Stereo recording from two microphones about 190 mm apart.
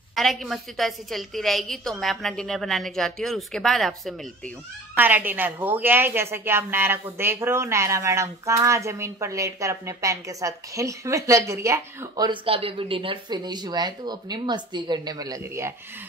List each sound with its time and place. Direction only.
0.1 s a woman's voice: centre (ahead or behind)
4.9 s a woman's voice: 10° right (ahead or behind)